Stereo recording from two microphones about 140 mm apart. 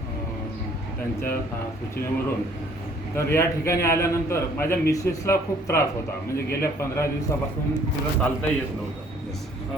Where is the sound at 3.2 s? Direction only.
20° left (ahead or behind).